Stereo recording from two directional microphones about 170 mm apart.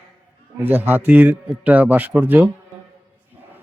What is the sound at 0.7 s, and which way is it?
A man's voice, 10° right (ahead or behind).